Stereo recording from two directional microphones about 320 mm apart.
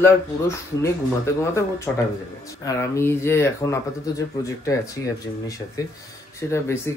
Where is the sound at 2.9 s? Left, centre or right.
Centre.